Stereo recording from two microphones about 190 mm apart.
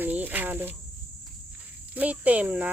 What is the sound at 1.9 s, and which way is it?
Cricket, 10° right (ahead or behind).